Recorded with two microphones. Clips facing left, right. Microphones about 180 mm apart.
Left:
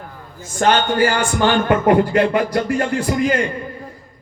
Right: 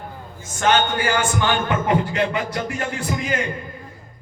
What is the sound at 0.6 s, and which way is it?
Speech, 40° left (ahead or behind).